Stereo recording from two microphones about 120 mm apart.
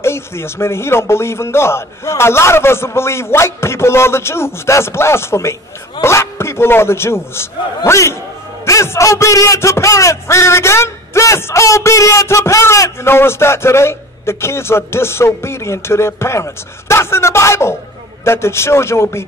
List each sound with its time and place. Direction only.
0.0 s a man's voice: 20° left (ahead or behind)